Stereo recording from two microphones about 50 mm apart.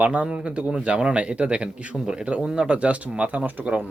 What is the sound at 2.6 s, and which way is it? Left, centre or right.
Speech, right.